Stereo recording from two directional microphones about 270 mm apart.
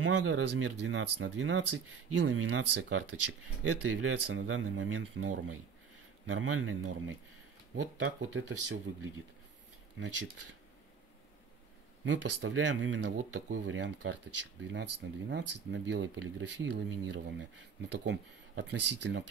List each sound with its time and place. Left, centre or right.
0.0 s speech: right
2.6 s speech: right
9.9 s speech: right
12.0 s speech: right